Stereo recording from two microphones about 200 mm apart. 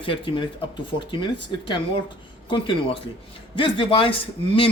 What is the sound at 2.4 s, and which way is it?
A man's voice, 25° left (ahead or behind).